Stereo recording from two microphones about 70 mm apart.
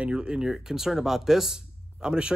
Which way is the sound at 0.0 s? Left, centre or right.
Centre.